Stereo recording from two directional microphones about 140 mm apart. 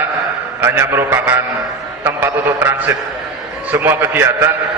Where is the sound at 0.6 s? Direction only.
15° right (ahead or behind).